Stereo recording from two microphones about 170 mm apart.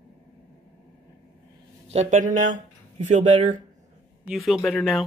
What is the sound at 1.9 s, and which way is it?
Speech, 45° right (ahead or behind).